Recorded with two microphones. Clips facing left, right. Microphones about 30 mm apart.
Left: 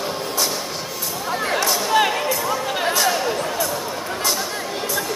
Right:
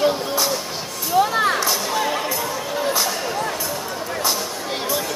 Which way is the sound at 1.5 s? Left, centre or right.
Centre.